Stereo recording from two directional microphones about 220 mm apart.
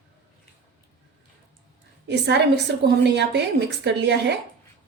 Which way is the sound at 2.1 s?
50° right (ahead or behind).